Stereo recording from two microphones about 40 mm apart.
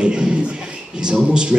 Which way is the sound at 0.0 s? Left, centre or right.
Right.